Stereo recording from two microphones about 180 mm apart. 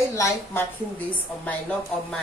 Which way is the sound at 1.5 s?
5° left (ahead or behind).